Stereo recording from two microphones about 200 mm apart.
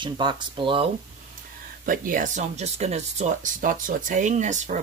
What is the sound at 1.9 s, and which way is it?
Speech, 40° right (ahead or behind).